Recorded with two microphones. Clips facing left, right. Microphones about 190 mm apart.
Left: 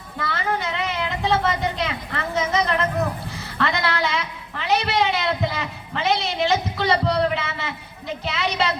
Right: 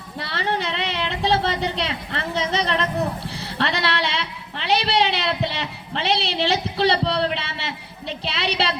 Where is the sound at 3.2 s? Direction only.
30° right (ahead or behind).